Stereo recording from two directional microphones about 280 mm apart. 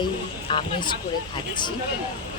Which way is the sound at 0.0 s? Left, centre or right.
Centre.